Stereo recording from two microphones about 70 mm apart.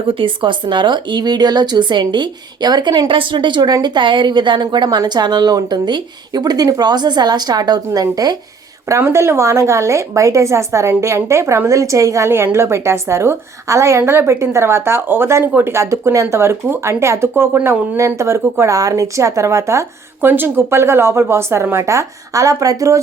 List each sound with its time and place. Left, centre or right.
0.7 s speech: right
8.9 s speech: right
12.3 s a woman's voice: right
20.2 s a woman's voice: right